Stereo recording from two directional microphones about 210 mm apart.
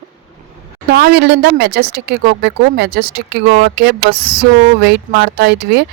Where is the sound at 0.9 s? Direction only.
50° right (ahead or behind).